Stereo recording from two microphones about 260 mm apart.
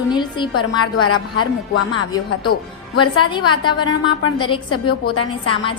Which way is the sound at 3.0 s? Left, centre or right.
Centre.